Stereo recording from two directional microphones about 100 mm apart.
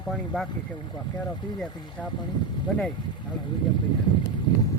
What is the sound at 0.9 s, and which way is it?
Speech, 50° left (ahead or behind).